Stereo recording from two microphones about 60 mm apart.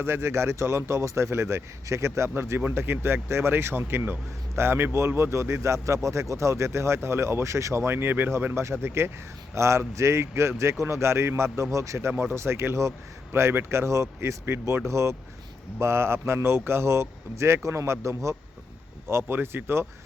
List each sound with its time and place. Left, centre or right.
0.0 s speech: right
2.3 s speech: right
9.6 s a man's voice: right
19.0 s speech: right